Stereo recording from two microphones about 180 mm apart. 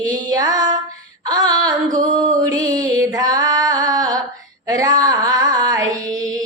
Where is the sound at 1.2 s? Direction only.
20° right (ahead or behind).